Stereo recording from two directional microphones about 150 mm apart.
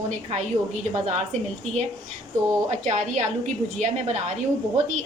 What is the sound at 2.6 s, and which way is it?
A woman's voice, 55° right (ahead or behind).